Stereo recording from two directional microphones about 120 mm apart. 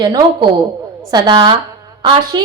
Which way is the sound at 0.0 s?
35° right (ahead or behind).